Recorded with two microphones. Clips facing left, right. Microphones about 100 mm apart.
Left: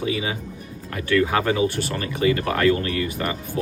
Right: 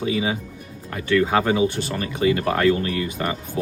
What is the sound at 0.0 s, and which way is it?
Speech, 30° right (ahead or behind).